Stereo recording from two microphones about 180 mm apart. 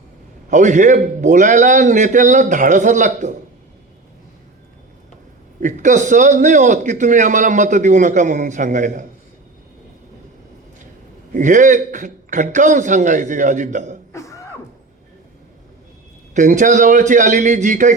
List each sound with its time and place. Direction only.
0.5 s a man's voice: 40° right (ahead or behind)
5.5 s a man's voice: 45° right (ahead or behind)
11.3 s a man's voice: 45° right (ahead or behind)
14.1 s beatboxing: 15° left (ahead or behind)
16.3 s a man's voice: 45° right (ahead or behind)